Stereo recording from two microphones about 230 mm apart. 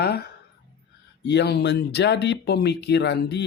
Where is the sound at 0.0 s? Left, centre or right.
Left.